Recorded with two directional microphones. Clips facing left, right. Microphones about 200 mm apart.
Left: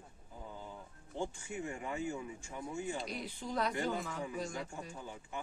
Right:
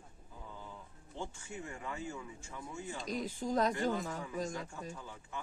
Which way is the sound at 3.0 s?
45° right (ahead or behind).